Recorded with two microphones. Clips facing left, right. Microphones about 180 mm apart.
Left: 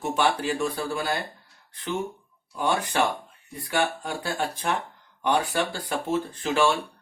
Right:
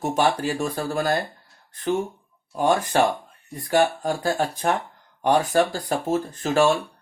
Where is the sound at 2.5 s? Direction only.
45° right (ahead or behind).